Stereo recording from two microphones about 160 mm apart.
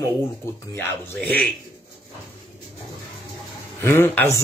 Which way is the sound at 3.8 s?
15° left (ahead or behind).